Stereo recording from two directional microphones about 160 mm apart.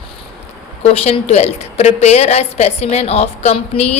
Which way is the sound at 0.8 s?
40° left (ahead or behind).